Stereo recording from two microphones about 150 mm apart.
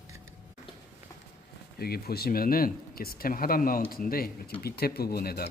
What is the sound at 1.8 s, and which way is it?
Speech, 90° left.